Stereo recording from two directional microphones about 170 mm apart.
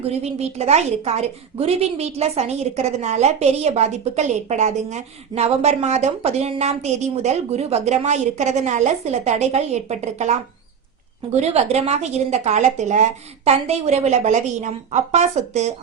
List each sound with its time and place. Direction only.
0.0 s a woman's voice: 35° right (ahead or behind)